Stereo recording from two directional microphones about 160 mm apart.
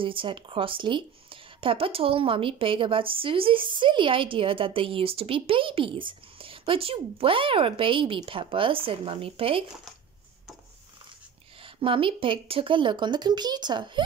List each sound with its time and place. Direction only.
0.0 s speech: 35° right (ahead or behind)
11.6 s speech: 35° right (ahead or behind)